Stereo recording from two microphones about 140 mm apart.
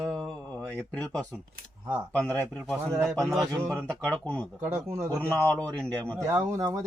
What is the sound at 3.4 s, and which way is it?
Speech, 20° right (ahead or behind).